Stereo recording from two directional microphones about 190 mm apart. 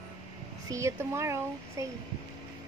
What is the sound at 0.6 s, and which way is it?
Speech, 15° right (ahead or behind).